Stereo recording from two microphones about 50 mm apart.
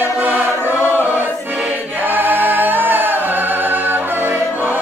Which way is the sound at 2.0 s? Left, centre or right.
Right.